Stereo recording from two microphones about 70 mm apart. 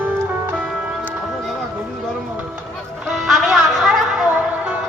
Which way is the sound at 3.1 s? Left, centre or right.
Centre.